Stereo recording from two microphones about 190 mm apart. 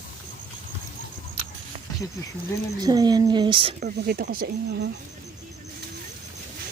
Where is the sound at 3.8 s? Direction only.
45° right (ahead or behind).